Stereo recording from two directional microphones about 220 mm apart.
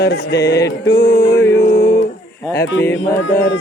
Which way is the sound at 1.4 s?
10° left (ahead or behind).